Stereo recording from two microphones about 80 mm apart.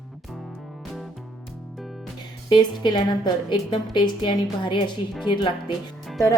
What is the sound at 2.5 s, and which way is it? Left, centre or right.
A woman's voice, left.